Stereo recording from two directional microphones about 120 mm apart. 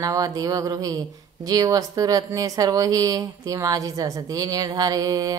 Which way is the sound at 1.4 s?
30° right (ahead or behind).